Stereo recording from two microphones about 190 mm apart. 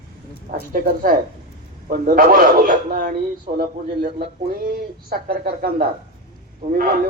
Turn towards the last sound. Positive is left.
turn(degrees=-50)  # may be behind; listen again after turning